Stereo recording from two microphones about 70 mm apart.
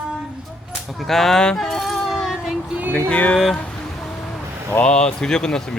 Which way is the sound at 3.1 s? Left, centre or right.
Centre.